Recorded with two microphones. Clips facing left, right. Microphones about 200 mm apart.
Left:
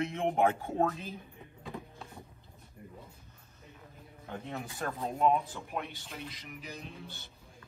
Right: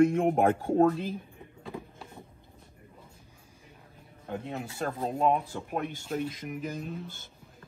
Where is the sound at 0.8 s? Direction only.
30° right (ahead or behind).